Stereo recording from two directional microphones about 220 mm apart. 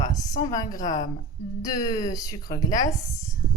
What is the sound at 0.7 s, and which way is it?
Speech, 35° left (ahead or behind).